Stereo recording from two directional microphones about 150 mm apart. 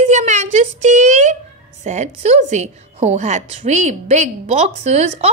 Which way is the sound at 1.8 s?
50° right (ahead or behind).